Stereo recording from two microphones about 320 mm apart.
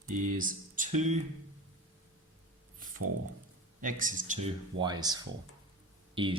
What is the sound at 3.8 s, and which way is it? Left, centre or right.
Speech, right.